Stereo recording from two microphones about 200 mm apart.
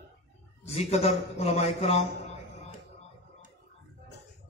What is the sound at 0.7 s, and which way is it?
A man's voice, 30° left (ahead or behind).